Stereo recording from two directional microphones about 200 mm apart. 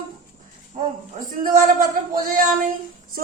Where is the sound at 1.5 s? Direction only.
45° right (ahead or behind).